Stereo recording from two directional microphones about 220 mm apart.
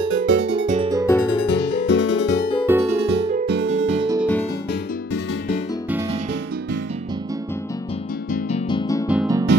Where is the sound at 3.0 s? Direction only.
50° right (ahead or behind).